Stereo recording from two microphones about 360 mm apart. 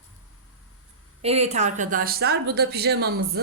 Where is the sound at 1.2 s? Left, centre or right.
Centre.